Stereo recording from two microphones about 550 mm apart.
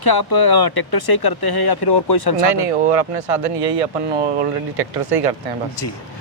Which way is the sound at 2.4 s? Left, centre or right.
Right.